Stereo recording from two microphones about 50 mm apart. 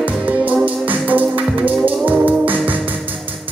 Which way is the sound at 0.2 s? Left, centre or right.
Right.